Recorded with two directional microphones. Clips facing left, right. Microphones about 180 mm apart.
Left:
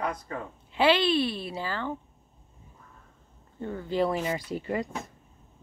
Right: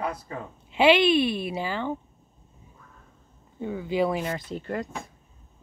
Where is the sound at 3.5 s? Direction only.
10° right (ahead or behind).